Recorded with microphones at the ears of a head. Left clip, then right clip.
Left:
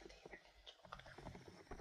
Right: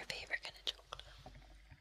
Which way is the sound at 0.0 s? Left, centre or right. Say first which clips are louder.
Right 16 dB; right.